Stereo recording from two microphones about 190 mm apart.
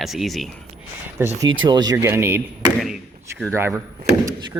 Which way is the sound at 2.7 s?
Centre (ahead or behind).